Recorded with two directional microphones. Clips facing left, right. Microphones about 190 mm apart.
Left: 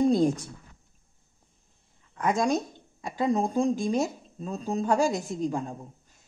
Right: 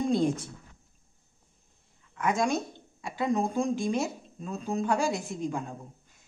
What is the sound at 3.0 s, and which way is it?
Speech, 40° left (ahead or behind).